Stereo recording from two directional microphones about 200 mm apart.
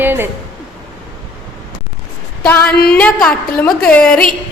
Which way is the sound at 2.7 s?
50° left (ahead or behind).